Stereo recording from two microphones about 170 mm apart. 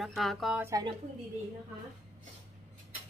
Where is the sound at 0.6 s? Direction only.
20° right (ahead or behind).